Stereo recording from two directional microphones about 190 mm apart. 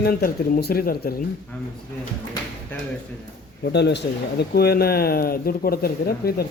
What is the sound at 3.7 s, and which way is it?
Speech, 65° left (ahead or behind).